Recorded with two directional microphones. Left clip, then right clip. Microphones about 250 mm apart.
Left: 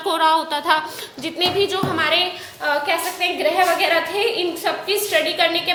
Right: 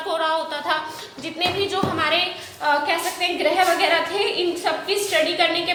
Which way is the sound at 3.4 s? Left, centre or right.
Left.